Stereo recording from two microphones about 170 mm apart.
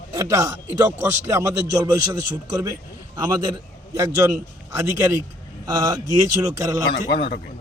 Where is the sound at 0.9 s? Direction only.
15° right (ahead or behind).